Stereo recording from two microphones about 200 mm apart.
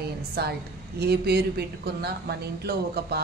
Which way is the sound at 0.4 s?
55° right (ahead or behind).